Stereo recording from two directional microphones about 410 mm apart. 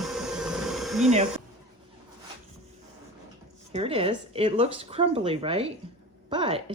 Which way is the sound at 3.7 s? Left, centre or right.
Centre.